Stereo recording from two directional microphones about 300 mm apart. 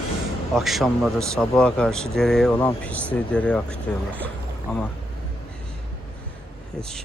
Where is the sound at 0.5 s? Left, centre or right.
Centre.